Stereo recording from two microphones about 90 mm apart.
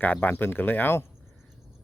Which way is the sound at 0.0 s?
20° left (ahead or behind).